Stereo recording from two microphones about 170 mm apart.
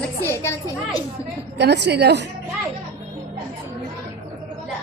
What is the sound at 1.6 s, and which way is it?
Speech, 85° right.